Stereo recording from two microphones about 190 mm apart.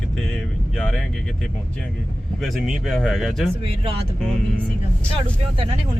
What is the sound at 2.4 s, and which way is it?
Speech, centre (ahead or behind).